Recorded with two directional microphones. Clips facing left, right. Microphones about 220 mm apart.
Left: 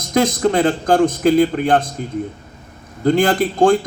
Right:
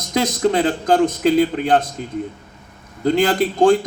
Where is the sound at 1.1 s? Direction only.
50° left (ahead or behind).